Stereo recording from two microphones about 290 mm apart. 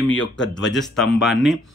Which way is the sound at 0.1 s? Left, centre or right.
Left.